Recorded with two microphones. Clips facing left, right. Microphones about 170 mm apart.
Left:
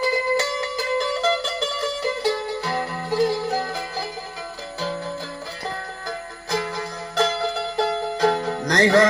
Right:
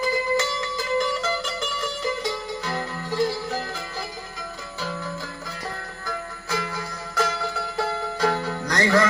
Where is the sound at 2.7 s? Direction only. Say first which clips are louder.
Left 3 dB; 35° left (ahead or behind).